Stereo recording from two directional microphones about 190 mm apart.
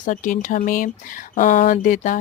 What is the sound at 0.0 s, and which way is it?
Speech, 45° left (ahead or behind).